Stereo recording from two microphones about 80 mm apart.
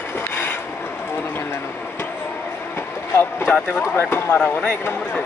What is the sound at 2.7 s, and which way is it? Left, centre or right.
Vehicle, left.